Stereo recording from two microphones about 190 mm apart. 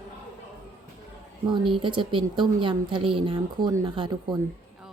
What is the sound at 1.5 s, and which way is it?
A woman's voice, 25° right (ahead or behind).